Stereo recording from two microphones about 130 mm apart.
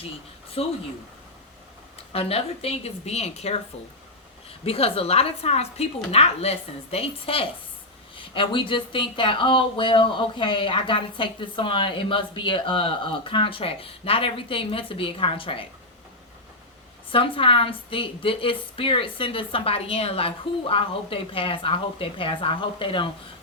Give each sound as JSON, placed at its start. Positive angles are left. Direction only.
{"t": 0.6, "sound": "a woman's voice", "side_deg": 50}
{"t": 2.0, "sound": "a woman's voice", "side_deg": 50}
{"t": 4.6, "sound": "a woman's voice", "side_deg": 50}
{"t": 17.1, "sound": "a woman's voice", "side_deg": 45}